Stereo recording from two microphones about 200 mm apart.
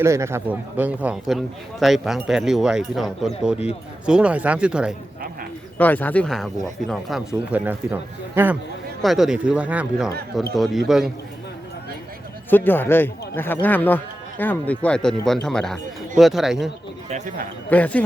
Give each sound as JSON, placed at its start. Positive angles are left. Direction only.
{"t": 0.0, "sound": "a man's voice", "side_deg": -15}
{"t": 5.7, "sound": "a man's voice", "side_deg": 10}
{"t": 12.5, "sound": "a man's voice", "side_deg": 10}
{"t": 17.1, "sound": "speech", "side_deg": -40}
{"t": 17.7, "sound": "a man's voice", "side_deg": 5}